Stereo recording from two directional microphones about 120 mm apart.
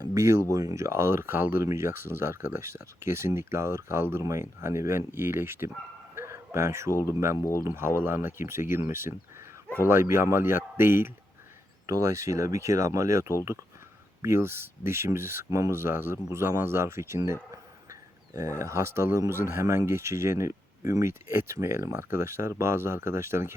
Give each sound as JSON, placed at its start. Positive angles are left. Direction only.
{"t": 0.0, "sound": "speech", "side_deg": -25}
{"t": 6.1, "sound": "a sound", "side_deg": -20}
{"t": 7.1, "sound": "speech", "side_deg": -20}
{"t": 7.3, "sound": "speech", "side_deg": 25}
{"t": 7.6, "sound": "speech", "side_deg": -20}
{"t": 18.6, "sound": "speech", "side_deg": -25}